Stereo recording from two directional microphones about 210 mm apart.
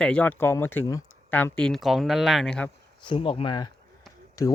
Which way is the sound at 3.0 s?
25° left (ahead or behind).